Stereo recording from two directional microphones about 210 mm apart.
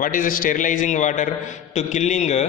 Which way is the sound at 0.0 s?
40° left (ahead or behind).